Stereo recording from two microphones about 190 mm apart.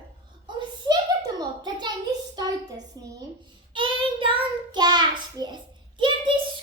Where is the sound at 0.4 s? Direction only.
20° right (ahead or behind).